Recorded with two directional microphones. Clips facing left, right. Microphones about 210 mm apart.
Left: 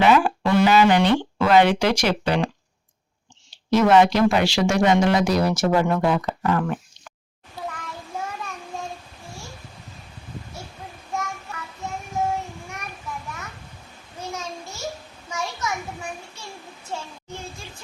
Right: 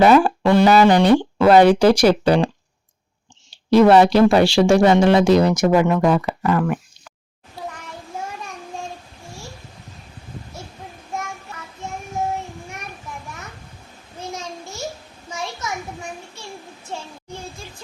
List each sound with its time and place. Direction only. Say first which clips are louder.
0.0 s speech: right 5 dB; 40° right (ahead or behind)
3.7 s speech: right 4 dB; 30° right (ahead or behind); by 6.7 s 10° right (ahead or behind)